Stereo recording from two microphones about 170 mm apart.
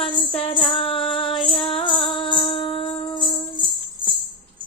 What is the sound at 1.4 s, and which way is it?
Music, 30° left (ahead or behind).